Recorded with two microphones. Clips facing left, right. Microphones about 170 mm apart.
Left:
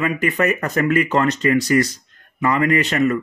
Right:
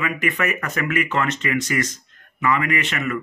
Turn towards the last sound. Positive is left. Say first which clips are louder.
# left 7 dB
turn(degrees=40)  # may be behind; listen again after turning